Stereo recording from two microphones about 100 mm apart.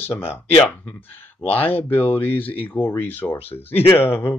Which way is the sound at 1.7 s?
20° left (ahead or behind).